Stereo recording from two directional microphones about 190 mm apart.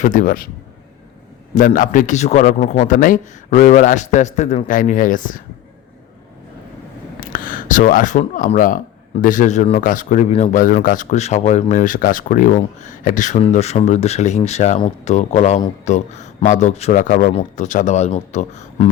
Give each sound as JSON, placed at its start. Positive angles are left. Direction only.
{"t": 0.0, "sound": "speech", "side_deg": 45}
{"t": 1.5, "sound": "speech", "side_deg": 45}
{"t": 7.2, "sound": "speech", "side_deg": 45}